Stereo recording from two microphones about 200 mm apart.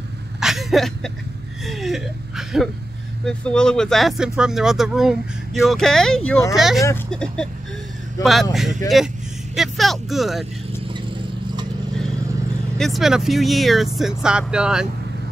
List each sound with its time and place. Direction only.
0.4 s vehicle: centre (ahead or behind)
1.7 s speech: centre (ahead or behind)
9.6 s a sound: centre (ahead or behind)
10.9 s vehicle: 25° right (ahead or behind)
12.7 s speech: centre (ahead or behind)